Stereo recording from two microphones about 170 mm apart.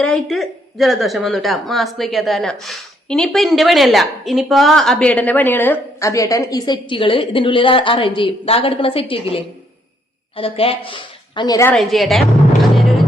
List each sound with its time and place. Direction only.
0.0 s a woman's voice: 5° left (ahead or behind); by 11.7 s 20° left (ahead or behind)
11.7 s a woman's voice: centre (ahead or behind)
12.7 s music: centre (ahead or behind)